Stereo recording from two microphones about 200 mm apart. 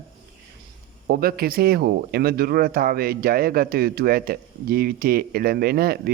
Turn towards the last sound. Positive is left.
turn(degrees=-50)  # may be behind; listen again after turning